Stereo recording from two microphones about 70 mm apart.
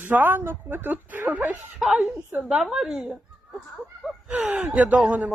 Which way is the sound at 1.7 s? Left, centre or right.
Centre.